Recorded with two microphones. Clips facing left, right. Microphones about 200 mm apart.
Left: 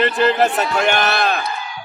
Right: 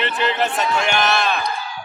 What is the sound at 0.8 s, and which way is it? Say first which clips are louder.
Speech: left 5 dB; 55° left (ahead or behind).